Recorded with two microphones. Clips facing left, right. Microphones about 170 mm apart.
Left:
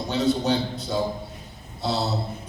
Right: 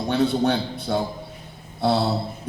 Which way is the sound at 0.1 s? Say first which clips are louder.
Right 2 dB; 60° right (ahead or behind).